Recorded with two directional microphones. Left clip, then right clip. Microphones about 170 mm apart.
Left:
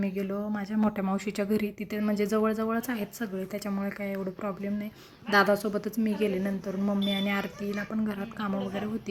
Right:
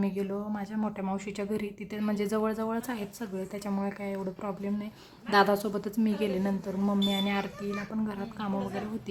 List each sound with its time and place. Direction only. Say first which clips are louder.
0.0 s speech: left 1 dB; 10° left (ahead or behind)